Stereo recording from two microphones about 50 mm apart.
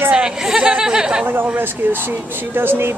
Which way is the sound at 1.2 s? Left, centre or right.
Right.